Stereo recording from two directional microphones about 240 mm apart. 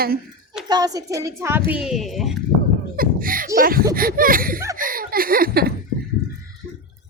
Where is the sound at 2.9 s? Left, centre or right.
Right.